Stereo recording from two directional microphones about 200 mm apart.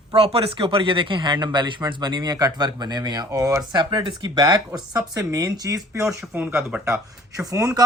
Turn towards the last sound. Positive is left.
turn(degrees=-15)  # may be behind; listen again after turning